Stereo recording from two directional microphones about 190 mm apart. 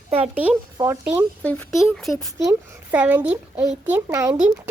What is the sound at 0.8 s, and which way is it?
Speech, 15° right (ahead or behind).